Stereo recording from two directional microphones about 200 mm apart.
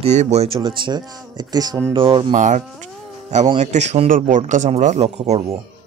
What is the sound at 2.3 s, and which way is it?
Speech, 40° right (ahead or behind).